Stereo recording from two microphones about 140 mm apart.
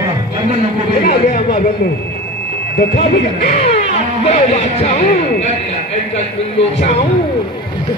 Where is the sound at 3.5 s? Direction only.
50° left (ahead or behind).